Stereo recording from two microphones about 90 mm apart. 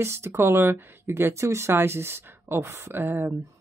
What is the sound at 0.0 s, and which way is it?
Speech, 30° right (ahead or behind).